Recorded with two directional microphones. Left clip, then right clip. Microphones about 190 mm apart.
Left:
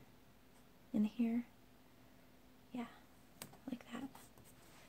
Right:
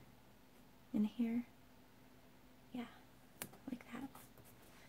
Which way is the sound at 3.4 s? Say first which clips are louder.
Even; 30° left (ahead or behind).